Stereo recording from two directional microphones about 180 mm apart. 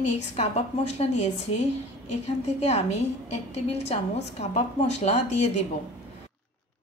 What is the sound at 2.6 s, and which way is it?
Speech, 35° left (ahead or behind).